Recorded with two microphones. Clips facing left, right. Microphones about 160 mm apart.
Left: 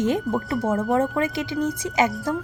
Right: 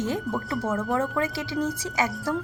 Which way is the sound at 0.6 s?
25° left (ahead or behind).